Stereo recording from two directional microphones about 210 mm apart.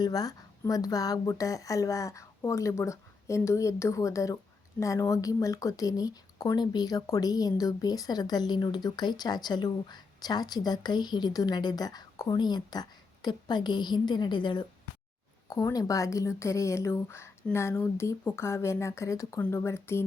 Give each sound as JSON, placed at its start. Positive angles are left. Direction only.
{"t": 0.0, "sound": "a woman's voice", "side_deg": 15}